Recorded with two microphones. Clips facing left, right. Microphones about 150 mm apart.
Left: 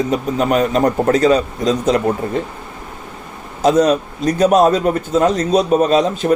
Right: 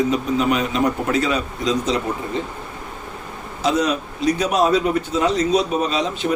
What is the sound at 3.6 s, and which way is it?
A man's voice, 45° left (ahead or behind).